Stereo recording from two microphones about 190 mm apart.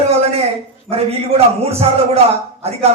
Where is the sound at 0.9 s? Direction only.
30° right (ahead or behind).